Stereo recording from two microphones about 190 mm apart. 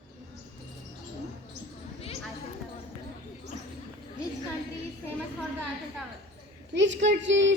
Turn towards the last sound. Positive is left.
turn(degrees=-70)  # may be behind; listen again after turning